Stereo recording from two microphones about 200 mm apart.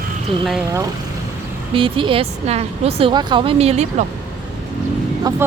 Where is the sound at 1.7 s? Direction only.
25° right (ahead or behind).